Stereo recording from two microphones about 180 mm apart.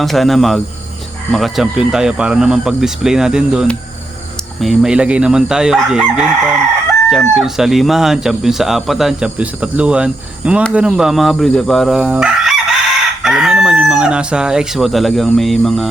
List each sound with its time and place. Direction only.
0.0 s speech: centre (ahead or behind)